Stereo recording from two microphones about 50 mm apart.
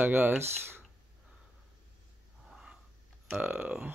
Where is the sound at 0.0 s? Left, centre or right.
Right.